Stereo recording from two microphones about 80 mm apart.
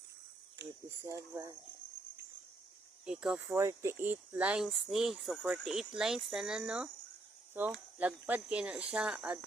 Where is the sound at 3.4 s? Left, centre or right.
Right; by 4.6 s centre.